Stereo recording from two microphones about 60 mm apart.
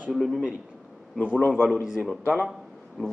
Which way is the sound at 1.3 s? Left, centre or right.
Left.